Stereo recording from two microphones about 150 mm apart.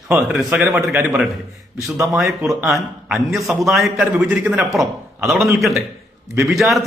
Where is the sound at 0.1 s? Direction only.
5° right (ahead or behind).